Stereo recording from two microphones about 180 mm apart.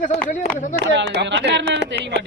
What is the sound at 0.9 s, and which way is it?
Speech, 75° right (ahead or behind).